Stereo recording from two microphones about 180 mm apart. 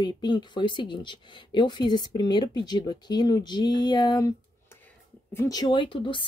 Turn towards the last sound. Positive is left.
turn(degrees=25)  # may be behind; listen again after turning